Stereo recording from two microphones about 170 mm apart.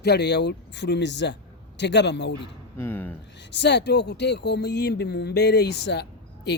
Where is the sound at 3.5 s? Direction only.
90° left.